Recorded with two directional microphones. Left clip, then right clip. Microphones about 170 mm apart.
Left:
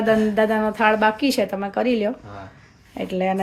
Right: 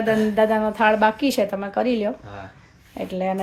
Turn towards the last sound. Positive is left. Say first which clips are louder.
# left 2 dB
turn(degrees=10)  # may be behind; listen again after turning